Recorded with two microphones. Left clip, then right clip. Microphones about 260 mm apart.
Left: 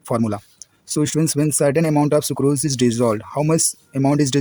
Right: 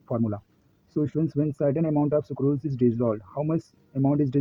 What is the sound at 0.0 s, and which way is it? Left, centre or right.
Speech, left.